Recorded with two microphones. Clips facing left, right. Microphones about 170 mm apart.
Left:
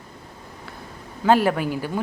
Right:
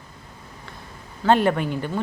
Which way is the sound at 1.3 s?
5° left (ahead or behind).